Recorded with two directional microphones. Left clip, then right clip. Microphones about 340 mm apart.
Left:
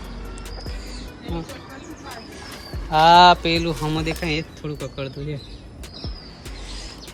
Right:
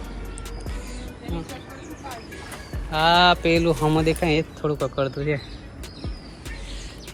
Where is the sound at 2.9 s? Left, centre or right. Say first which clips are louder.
Left 5 dB; centre.